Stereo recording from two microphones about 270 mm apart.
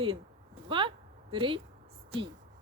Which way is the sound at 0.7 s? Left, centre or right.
Centre.